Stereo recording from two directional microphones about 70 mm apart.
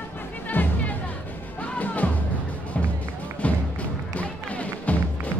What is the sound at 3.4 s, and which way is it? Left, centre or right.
Music, centre.